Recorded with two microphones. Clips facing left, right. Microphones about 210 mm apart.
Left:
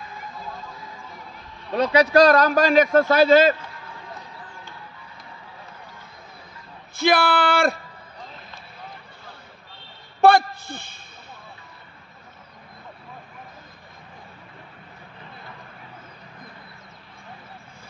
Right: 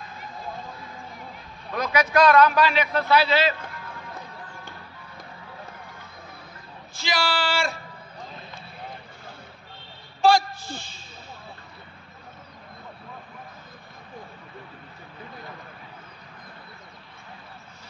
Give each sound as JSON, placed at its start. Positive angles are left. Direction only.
{"t": 1.7, "sound": "speech", "side_deg": 30}
{"t": 7.0, "sound": "speech", "side_deg": 60}
{"t": 10.2, "sound": "a sound", "side_deg": 60}